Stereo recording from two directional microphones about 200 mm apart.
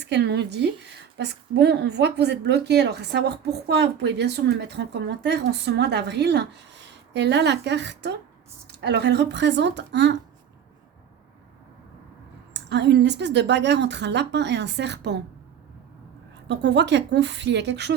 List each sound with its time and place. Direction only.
0.0 s a woman's voice: 60° right (ahead or behind)
12.6 s a woman's voice: 60° right (ahead or behind)
16.5 s a woman's voice: 60° right (ahead or behind)